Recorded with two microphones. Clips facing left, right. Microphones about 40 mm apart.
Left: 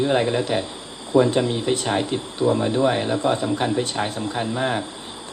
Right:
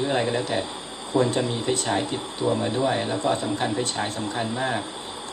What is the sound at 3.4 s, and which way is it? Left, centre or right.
Speech, centre.